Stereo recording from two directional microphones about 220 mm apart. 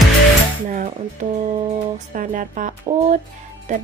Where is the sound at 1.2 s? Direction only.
35° right (ahead or behind).